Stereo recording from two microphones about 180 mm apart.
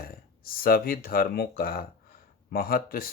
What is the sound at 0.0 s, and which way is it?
Speech, 55° left (ahead or behind).